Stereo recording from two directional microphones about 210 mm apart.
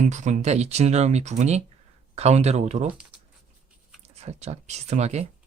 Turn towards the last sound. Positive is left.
turn(degrees=-30)  # may be behind; listen again after turning